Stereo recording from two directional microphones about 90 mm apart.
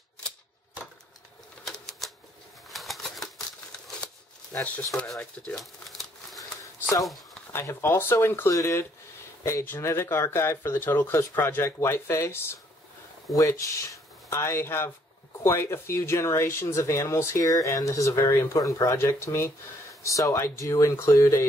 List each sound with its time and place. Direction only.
1.7 s typewriter: 5° left (ahead or behind)
2.7 s a sound: centre (ahead or behind)
4.5 s speech: 20° left (ahead or behind)
5.2 s crumpling: 10° left (ahead or behind)
6.6 s a sound: 40° left (ahead or behind)
7.5 s speech: 25° left (ahead or behind)